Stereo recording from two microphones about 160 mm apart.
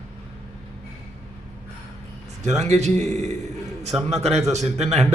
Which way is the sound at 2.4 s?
45° right (ahead or behind).